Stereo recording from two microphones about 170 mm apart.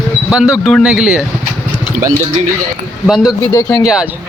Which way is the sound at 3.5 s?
15° left (ahead or behind).